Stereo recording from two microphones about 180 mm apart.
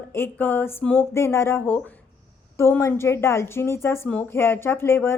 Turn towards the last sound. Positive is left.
turn(degrees=15)  # may be behind; listen again after turning